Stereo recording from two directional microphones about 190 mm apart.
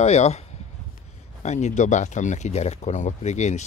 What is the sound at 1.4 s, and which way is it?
Speech, 35° left (ahead or behind).